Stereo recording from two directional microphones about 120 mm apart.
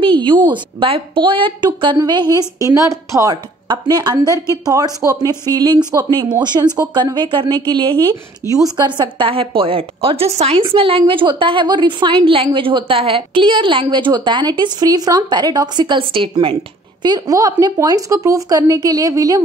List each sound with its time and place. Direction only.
0.0 s a woman's voice: 45° right (ahead or behind)
17.0 s speech: 35° right (ahead or behind)